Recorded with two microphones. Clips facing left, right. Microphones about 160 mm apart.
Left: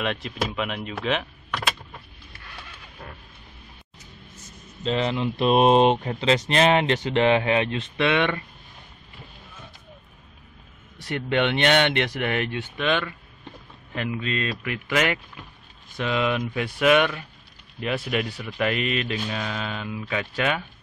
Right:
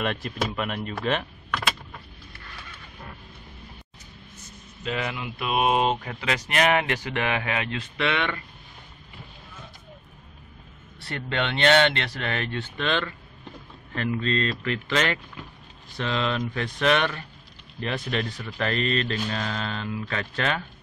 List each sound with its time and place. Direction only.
0.0 s speech: centre (ahead or behind)
4.8 s speech: 30° left (ahead or behind)
11.0 s speech: 15° left (ahead or behind)